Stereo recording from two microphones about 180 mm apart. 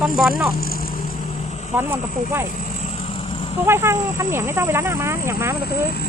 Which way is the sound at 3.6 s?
15° right (ahead or behind).